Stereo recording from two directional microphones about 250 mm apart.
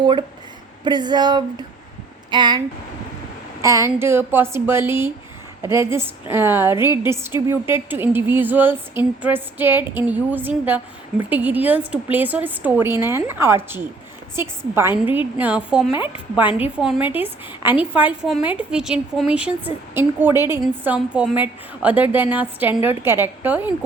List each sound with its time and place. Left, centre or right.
0.0 s a woman's voice: centre
3.6 s a woman's voice: centre